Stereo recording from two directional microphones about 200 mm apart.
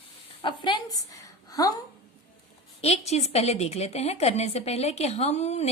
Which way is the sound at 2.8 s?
35° left (ahead or behind).